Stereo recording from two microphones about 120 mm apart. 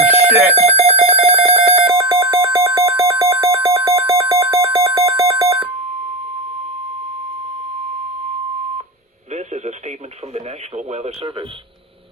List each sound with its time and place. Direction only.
0.1 s alarm clock: 15° right (ahead or behind)
0.5 s alarm clock: 60° right (ahead or behind)
1.9 s alarm: 30° right (ahead or behind)
4.2 s a sound: 25° right (ahead or behind)
9.3 s radio: 70° right (ahead or behind)
10.3 s speech: 65° right (ahead or behind)